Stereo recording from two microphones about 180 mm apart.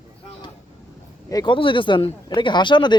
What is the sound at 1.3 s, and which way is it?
Speech, 25° left (ahead or behind).